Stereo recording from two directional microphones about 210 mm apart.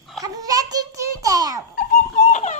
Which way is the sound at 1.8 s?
40° left (ahead or behind).